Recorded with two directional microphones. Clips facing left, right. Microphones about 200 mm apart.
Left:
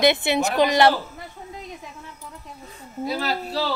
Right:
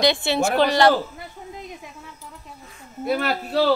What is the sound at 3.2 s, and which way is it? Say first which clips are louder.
Speech: right 4 dB; 60° right (ahead or behind).